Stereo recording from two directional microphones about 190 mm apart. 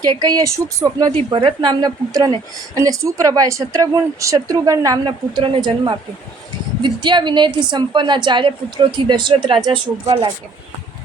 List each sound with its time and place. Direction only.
0.0 s a woman's voice: 20° right (ahead or behind)
1.1 s a woman's voice: 30° right (ahead or behind)